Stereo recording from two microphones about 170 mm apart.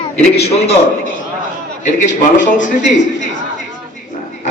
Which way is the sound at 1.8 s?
50° left (ahead or behind).